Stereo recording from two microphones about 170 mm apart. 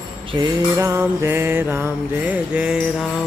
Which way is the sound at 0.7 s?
15° right (ahead or behind).